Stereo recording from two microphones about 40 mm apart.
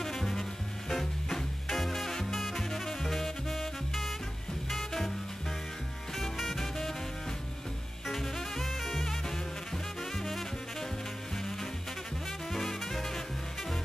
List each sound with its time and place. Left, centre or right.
0.0 s music: centre
6.3 s music: centre
8.1 s music: centre
12.5 s music: centre